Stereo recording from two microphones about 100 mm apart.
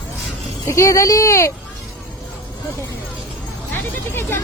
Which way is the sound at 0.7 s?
35° left (ahead or behind).